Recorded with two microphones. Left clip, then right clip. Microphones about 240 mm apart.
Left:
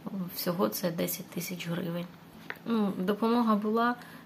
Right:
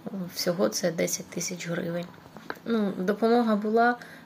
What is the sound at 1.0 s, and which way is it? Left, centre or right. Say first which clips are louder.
Speech: right 6 dB; left.